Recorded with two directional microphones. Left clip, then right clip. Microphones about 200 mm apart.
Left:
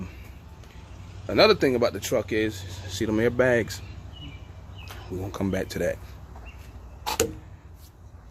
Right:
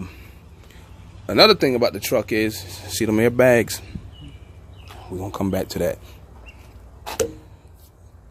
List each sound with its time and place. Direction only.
1.3 s speech: 40° right (ahead or behind)
5.2 s speech: 25° right (ahead or behind)